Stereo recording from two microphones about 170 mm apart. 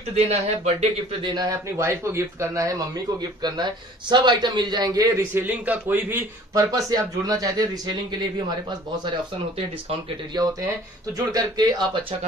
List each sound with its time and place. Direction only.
0.1 s a man's voice: 40° right (ahead or behind)
1.3 s speech: 20° right (ahead or behind)
10.3 s speech: 20° right (ahead or behind)